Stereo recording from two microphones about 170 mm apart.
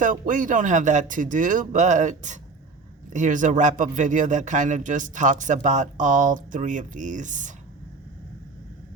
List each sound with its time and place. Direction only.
0.0 s speech: 50° right (ahead or behind)